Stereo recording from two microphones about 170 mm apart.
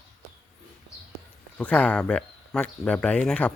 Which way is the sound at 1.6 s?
5° left (ahead or behind).